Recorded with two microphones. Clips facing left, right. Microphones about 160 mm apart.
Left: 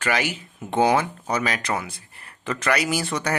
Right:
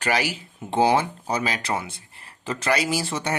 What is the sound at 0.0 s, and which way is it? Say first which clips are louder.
Speech: even; 35° right (ahead or behind).